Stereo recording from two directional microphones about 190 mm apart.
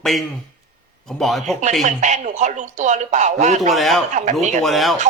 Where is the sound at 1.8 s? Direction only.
40° right (ahead or behind).